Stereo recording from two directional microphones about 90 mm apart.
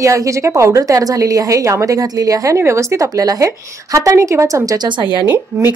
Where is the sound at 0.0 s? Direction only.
35° right (ahead or behind).